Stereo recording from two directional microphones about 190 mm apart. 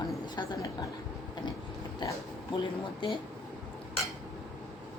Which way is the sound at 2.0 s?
20° left (ahead or behind).